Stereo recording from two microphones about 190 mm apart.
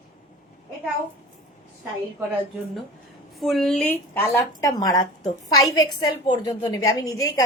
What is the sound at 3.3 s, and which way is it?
A woman's voice, centre (ahead or behind).